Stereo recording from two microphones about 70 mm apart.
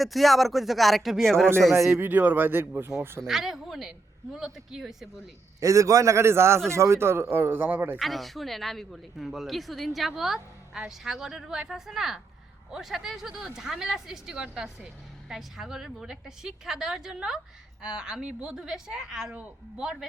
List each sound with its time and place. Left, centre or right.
0.0 s a man's voice: centre
1.9 s speech: right
3.2 s a man's voice: centre
5.5 s a man's voice: right
7.9 s a man's voice: centre
19.3 s speech: right
19.8 s a woman's voice: centre